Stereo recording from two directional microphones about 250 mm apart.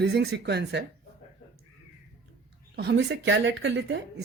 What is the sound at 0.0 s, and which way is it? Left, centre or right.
Speech, right.